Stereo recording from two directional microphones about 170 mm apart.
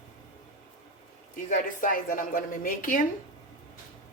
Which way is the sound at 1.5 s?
50° left (ahead or behind).